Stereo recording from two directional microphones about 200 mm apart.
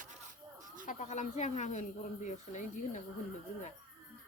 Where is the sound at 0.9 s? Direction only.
35° left (ahead or behind).